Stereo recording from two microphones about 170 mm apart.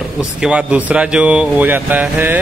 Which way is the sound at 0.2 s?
5° right (ahead or behind).